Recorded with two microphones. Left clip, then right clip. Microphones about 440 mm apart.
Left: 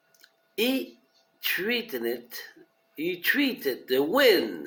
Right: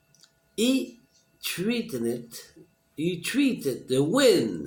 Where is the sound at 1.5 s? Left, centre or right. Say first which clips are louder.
Even; centre.